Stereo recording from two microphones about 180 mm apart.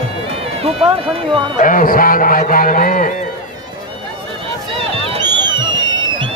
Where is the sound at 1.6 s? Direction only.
45° left (ahead or behind).